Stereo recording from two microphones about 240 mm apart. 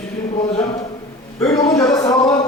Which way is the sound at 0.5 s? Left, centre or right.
Centre.